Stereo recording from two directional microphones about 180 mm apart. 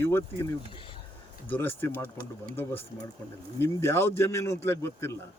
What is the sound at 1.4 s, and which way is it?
Speech, 10° left (ahead or behind).